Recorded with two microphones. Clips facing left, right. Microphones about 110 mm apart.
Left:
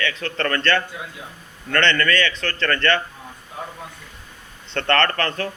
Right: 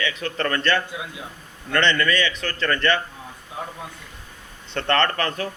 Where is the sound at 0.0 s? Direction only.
15° right (ahead or behind).